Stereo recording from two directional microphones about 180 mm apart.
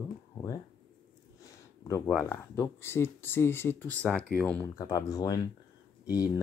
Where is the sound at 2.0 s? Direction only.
15° left (ahead or behind).